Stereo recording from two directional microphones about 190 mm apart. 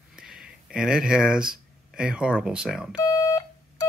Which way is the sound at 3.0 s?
15° left (ahead or behind).